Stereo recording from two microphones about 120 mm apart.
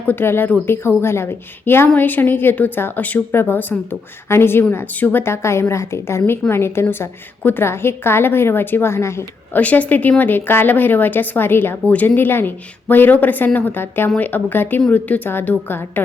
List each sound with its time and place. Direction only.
0.0 s a woman's voice: 15° left (ahead or behind)